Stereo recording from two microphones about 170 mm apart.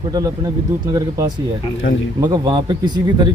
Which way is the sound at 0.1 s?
20° right (ahead or behind).